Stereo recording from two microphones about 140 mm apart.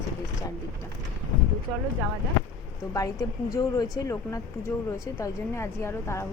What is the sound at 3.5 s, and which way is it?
Speech, 25° left (ahead or behind).